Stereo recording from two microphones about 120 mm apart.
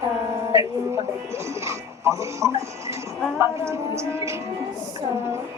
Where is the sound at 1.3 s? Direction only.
25° right (ahead or behind).